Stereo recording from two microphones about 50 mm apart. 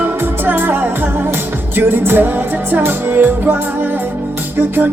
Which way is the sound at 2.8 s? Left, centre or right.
Right.